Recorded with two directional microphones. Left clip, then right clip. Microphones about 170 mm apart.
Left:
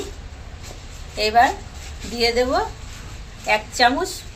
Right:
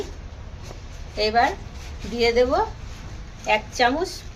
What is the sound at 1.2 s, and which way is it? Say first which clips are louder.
A woman's voice: left 4 dB; 10° right (ahead or behind).